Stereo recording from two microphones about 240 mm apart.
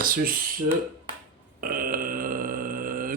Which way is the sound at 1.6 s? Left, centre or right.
Right.